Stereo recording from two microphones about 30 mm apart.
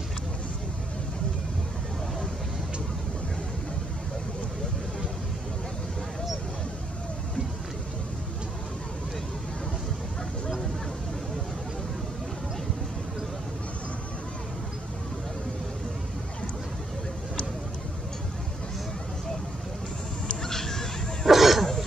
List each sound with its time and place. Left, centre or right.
20.4 s bow-wow: centre
21.3 s throat clearing: centre